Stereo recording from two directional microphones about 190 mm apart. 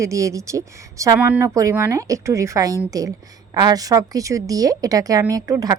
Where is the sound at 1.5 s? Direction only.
15° right (ahead or behind).